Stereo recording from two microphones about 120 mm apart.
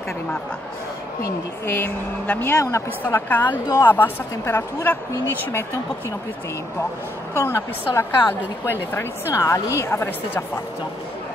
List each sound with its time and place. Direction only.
1.7 s a woman's voice: 15° left (ahead or behind)
7.3 s a woman's voice: 20° left (ahead or behind)